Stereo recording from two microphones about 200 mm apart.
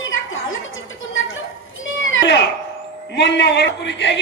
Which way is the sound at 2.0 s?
60° left (ahead or behind).